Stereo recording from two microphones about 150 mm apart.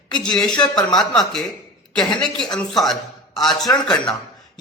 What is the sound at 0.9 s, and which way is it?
Speech, 5° left (ahead or behind).